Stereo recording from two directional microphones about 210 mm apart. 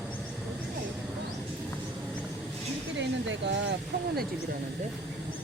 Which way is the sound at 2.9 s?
60° right (ahead or behind).